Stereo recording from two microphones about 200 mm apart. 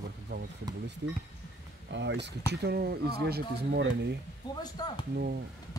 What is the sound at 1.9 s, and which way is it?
Speech, 60° right (ahead or behind).